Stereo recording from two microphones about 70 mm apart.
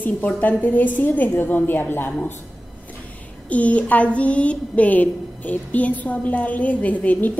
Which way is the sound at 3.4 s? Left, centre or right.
Left.